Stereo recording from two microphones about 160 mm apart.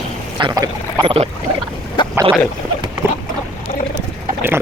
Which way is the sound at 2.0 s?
30° left (ahead or behind).